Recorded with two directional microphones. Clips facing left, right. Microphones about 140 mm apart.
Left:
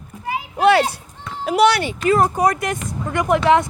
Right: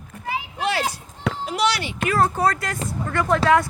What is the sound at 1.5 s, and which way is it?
Speech, 60° left (ahead or behind).